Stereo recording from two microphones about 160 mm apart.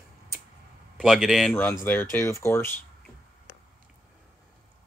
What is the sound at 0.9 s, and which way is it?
Speech, centre (ahead or behind).